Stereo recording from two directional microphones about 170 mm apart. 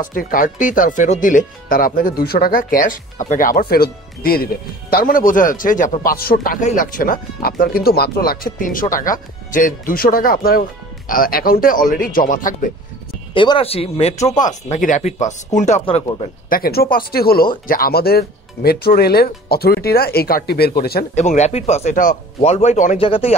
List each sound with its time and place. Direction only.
0.0 s speech: 55° left (ahead or behind)
13.3 s speech: 30° left (ahead or behind)
15.8 s speech: 35° left (ahead or behind)
16.4 s speech: 60° left (ahead or behind)
21.1 s speech: 40° left (ahead or behind)